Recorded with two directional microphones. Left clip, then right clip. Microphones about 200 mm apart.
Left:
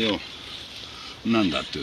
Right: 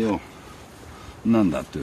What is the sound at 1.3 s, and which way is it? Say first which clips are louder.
Speech: right 1 dB; 35° right (ahead or behind).